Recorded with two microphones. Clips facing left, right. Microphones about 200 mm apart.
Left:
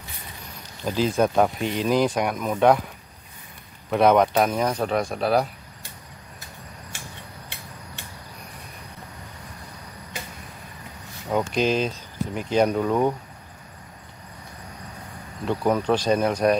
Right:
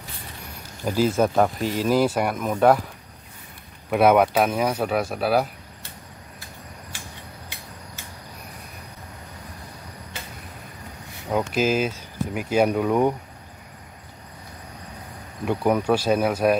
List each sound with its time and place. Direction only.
0.8 s speech: 10° right (ahead or behind)
3.9 s speech: 5° right (ahead or behind)
11.2 s speech: 5° right (ahead or behind)
15.4 s speech: 10° right (ahead or behind)